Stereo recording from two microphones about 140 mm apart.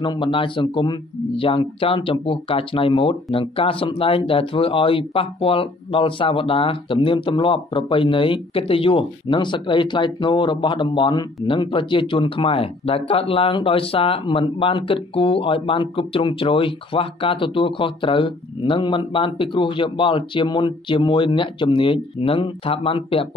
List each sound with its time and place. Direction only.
0.0 s speech: 35° left (ahead or behind)